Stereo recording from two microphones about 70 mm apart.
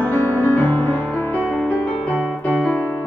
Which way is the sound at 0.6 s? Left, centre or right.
Left.